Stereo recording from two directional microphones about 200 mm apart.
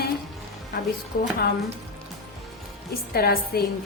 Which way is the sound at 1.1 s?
45° left (ahead or behind).